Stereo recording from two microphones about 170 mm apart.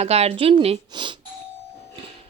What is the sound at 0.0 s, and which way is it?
Speech, 35° right (ahead or behind).